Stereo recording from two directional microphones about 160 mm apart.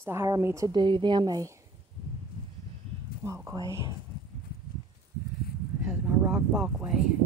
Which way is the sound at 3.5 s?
20° right (ahead or behind).